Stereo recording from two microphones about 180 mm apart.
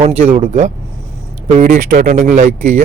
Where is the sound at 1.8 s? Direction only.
55° right (ahead or behind).